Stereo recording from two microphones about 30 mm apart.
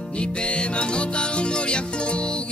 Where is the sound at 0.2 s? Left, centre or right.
Left.